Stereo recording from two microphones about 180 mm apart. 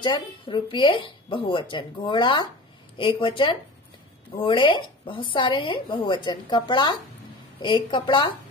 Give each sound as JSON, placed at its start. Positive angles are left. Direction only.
{"t": 0.0, "sound": "a woman's voice", "side_deg": 25}